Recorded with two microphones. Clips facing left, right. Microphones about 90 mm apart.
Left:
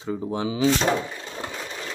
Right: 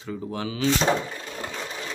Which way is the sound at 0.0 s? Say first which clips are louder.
Left 4 dB; 25° left (ahead or behind).